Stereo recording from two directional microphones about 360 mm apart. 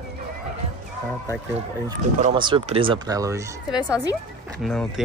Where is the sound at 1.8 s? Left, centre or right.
Centre.